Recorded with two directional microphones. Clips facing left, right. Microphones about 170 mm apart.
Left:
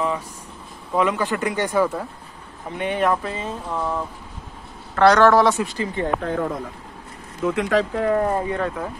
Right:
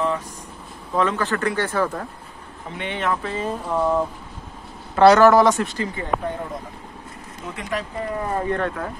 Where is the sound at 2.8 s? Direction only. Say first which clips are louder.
Left 6 dB; 40° left (ahead or behind).